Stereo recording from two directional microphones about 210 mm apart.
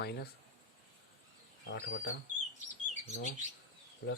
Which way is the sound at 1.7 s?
60° left (ahead or behind).